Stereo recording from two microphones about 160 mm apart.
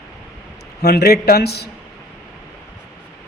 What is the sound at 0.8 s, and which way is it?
Speech, 80° left.